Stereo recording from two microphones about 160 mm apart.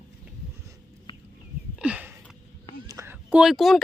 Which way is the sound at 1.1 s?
30° left (ahead or behind).